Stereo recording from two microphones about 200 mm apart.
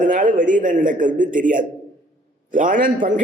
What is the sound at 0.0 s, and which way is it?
A man's voice, 40° right (ahead or behind).